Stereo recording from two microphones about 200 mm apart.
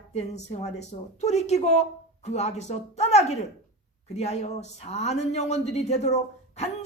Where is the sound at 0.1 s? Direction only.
35° left (ahead or behind).